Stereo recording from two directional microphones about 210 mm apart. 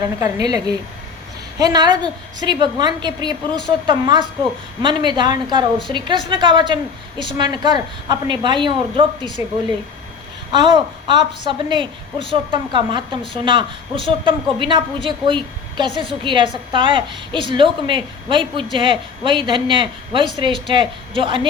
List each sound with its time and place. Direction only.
0.2 s a woman's voice: 20° right (ahead or behind)
10.5 s a woman's voice: 20° right (ahead or behind)